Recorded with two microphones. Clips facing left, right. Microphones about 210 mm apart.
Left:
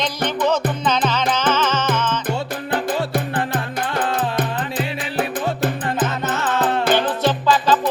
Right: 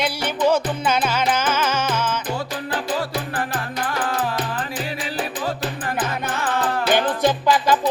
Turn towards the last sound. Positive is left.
turn(degrees=-10)  # may be behind; listen again after turning